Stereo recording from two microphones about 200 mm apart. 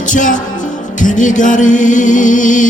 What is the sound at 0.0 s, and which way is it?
Music, 40° left (ahead or behind).